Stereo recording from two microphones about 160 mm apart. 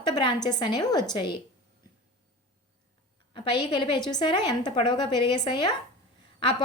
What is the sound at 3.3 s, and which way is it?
A woman's voice, 30° left (ahead or behind).